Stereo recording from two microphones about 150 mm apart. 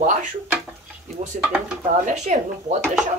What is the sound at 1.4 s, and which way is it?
Speech, 15° right (ahead or behind).